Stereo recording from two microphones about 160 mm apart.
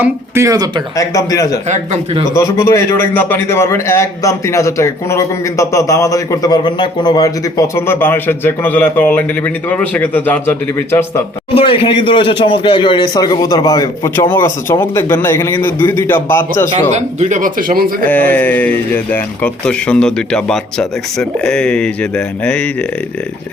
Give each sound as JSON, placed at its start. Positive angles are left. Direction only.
{"t": 0.0, "sound": "speech", "side_deg": -15}
{"t": 0.9, "sound": "speech", "side_deg": 20}
{"t": 1.7, "sound": "speech", "side_deg": -45}
{"t": 2.3, "sound": "a man's voice", "side_deg": 20}
{"t": 11.5, "sound": "speech", "side_deg": 35}
{"t": 16.9, "sound": "speech", "side_deg": -50}
{"t": 18.0, "sound": "a man's voice", "side_deg": 10}